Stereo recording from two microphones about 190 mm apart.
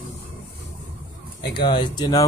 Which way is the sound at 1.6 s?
25° left (ahead or behind).